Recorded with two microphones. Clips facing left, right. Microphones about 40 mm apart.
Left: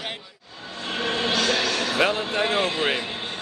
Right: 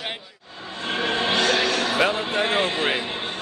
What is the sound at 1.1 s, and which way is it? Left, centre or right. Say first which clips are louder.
Music: right 2 dB; right.